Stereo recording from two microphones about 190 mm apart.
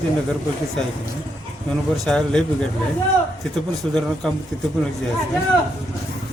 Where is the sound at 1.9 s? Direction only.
5° left (ahead or behind).